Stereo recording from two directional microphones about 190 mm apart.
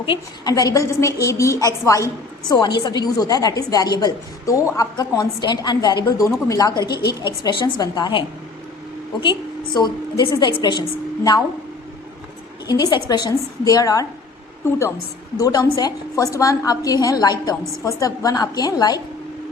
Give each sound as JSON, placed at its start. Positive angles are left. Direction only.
{"t": 0.0, "sound": "a woman's voice", "side_deg": 25}
{"t": 9.7, "sound": "a woman's voice", "side_deg": 20}
{"t": 12.6, "sound": "a woman's voice", "side_deg": 20}